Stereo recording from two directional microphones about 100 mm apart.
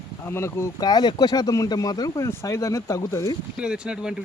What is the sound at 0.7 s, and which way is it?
Speech, 40° left (ahead or behind).